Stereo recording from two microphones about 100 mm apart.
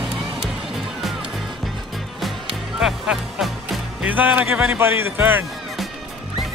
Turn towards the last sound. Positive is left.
turn(degrees=-20)  # may be behind; listen again after turning